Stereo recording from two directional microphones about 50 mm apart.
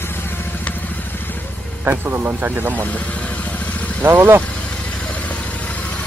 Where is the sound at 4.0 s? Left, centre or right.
Right.